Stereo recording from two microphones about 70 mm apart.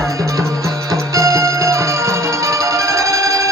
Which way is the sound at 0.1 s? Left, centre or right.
Right.